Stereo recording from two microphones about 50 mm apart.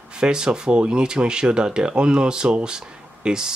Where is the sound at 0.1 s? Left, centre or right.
Centre.